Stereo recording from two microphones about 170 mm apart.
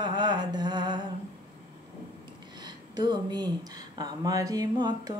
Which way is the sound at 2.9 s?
25° right (ahead or behind).